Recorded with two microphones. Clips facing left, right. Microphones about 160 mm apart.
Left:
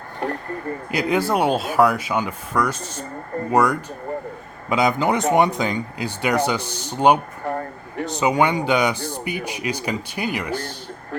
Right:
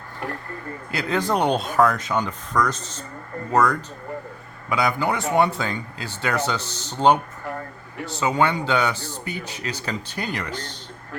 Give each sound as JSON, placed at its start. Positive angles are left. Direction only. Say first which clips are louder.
{"t": 0.2, "sound": "speech", "louder": "left 5 dB", "side_deg": 35}
{"t": 0.9, "sound": "speech", "louder": "left 3 dB", "side_deg": 15}
{"t": 7.4, "sound": "a sound", "louder": "left 6 dB", "side_deg": 35}
{"t": 8.0, "sound": "speech", "louder": "left 2 dB", "side_deg": 15}